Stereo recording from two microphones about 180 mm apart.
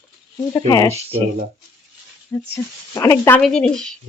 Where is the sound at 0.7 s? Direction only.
20° left (ahead or behind).